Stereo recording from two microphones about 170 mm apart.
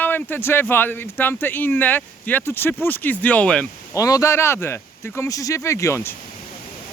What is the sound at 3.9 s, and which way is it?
Speech, 20° left (ahead or behind).